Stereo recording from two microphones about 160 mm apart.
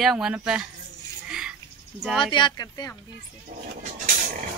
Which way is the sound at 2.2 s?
30° left (ahead or behind).